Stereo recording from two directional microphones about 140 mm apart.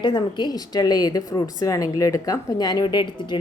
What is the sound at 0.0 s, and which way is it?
Speech, 30° left (ahead or behind).